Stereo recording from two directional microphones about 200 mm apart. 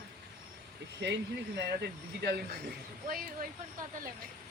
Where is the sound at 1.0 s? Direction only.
60° right (ahead or behind).